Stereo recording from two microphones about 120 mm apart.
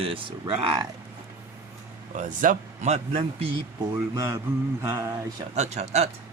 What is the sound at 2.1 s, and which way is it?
Speech, 90° right.